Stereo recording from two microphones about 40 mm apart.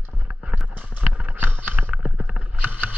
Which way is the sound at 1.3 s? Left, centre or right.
Right.